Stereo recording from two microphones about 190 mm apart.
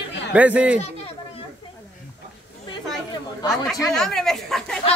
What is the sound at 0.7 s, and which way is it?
Speech, 35° left (ahead or behind).